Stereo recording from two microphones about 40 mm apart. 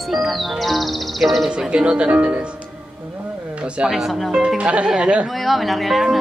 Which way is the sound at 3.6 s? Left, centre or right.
Right.